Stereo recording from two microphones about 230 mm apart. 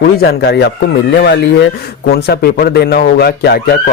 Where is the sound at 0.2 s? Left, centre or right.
Left.